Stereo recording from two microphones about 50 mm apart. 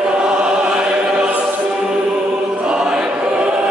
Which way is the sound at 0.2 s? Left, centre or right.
Centre.